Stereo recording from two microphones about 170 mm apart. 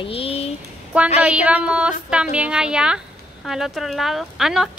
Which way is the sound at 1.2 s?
5° right (ahead or behind).